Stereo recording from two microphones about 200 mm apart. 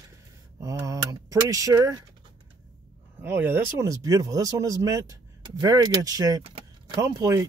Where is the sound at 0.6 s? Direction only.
15° right (ahead or behind).